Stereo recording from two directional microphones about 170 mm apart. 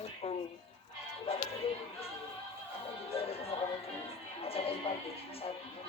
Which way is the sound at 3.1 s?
35° left (ahead or behind).